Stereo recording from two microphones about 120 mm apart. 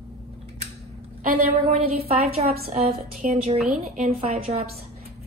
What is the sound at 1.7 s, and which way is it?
A woman's voice, 60° right (ahead or behind).